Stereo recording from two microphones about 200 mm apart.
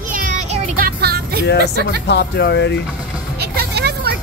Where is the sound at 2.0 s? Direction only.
55° left (ahead or behind).